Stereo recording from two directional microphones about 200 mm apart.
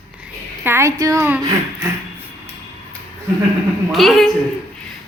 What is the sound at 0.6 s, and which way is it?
Speech, 15° right (ahead or behind).